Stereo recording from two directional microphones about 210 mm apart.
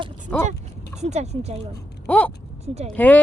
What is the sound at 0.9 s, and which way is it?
Speech, 30° right (ahead or behind).